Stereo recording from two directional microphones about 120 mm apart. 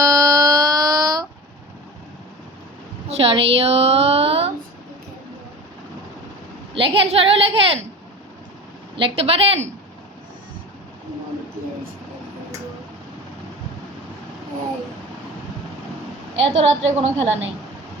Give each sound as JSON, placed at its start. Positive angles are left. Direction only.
{"t": 0.0, "sound": "a sound", "side_deg": -30}
{"t": 3.1, "sound": "a woman's voice", "side_deg": -55}
{"t": 6.7, "sound": "a woman's voice", "side_deg": -50}
{"t": 9.0, "sound": "a woman's voice", "side_deg": -50}
{"t": 16.4, "sound": "a woman's voice", "side_deg": -60}